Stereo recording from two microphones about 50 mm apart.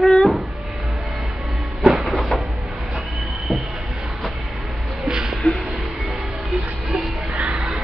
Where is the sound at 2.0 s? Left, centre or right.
Centre.